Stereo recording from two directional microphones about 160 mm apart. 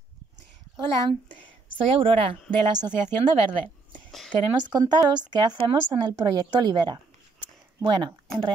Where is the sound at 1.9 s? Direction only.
35° right (ahead or behind).